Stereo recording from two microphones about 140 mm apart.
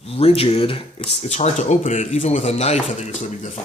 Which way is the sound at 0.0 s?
45° left (ahead or behind).